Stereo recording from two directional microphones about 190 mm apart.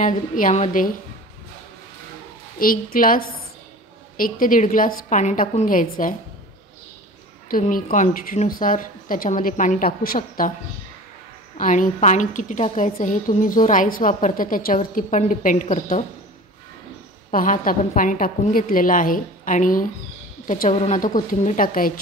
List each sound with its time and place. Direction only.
0.0 s a woman's voice: 40° left (ahead or behind)
2.6 s a woman's voice: 50° left (ahead or behind)
7.4 s a woman's voice: 45° left (ahead or behind)
11.5 s a woman's voice: 45° left (ahead or behind)
17.3 s a woman's voice: 45° left (ahead or behind)